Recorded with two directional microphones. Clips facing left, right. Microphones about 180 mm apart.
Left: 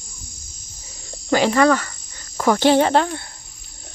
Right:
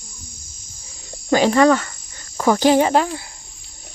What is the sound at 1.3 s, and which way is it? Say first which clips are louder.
Cricket: right 2 dB; 15° right (ahead or behind).